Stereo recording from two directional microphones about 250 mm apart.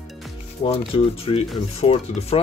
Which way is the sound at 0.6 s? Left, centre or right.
Left.